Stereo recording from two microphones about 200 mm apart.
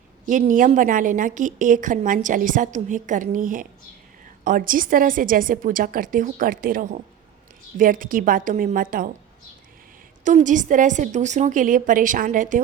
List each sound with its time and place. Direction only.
0.3 s a woman's voice: 40° right (ahead or behind)
10.2 s a woman's voice: 40° right (ahead or behind)